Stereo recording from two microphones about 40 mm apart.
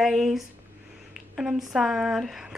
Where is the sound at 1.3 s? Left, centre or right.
Centre.